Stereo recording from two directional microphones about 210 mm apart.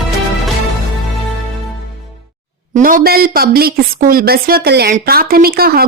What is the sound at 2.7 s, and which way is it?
A woman's voice, 40° right (ahead or behind).